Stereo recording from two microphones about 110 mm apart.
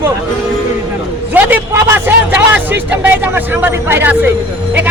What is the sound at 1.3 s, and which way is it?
A man's voice, 20° right (ahead or behind).